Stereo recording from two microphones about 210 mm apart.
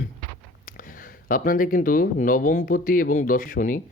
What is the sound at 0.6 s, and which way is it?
Speech, 40° left (ahead or behind).